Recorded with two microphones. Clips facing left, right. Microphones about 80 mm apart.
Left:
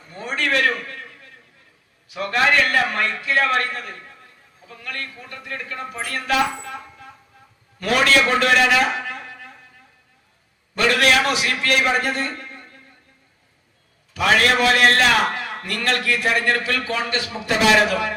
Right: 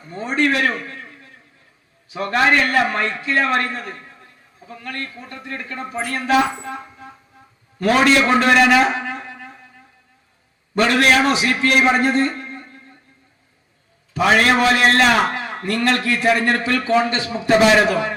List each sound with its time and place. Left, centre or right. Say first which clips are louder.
0.1 s a man's voice: right 4 dB; right
10.8 s a man's voice: right 3 dB; right
14.1 s a man's voice: right 2 dB; right